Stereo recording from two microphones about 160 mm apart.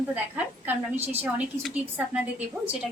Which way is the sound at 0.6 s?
10° right (ahead or behind).